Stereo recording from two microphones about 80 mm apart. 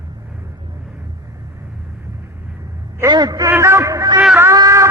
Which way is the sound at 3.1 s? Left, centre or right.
Right.